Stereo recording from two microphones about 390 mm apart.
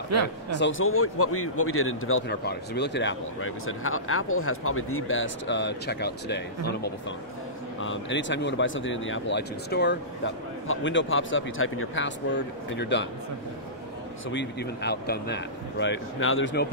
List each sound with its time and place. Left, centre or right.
0.1 s speech: right
0.6 s speech: left
14.3 s speech: left